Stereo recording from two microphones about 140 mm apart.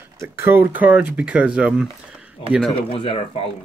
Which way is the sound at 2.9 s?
45° left (ahead or behind).